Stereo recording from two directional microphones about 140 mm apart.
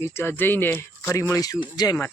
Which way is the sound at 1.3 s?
25° left (ahead or behind).